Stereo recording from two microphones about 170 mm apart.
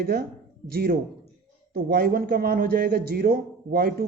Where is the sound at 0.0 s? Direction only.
65° right (ahead or behind).